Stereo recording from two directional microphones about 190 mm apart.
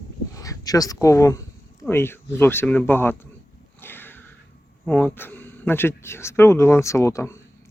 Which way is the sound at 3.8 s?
10° left (ahead or behind).